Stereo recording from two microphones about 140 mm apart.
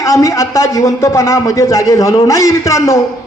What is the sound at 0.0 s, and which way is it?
A man's voice, 20° left (ahead or behind).